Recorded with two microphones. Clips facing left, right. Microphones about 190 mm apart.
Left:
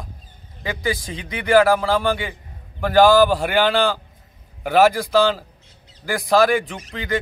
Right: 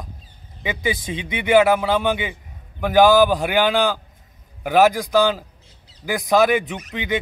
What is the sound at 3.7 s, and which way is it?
A man's voice, centre (ahead or behind).